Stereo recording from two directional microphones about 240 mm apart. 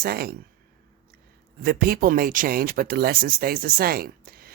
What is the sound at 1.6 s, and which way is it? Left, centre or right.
Speech, right.